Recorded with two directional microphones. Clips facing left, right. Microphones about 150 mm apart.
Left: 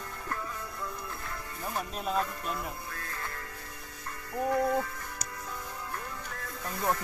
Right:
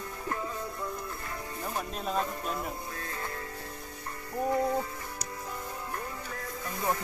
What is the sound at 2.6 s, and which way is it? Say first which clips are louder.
Music: right 2 dB; 20° right (ahead or behind).